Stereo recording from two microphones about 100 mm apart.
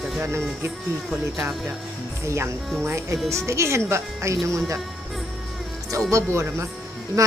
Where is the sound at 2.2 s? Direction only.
25° right (ahead or behind).